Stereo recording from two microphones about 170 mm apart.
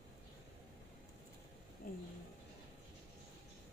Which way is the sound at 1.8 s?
55° left (ahead or behind).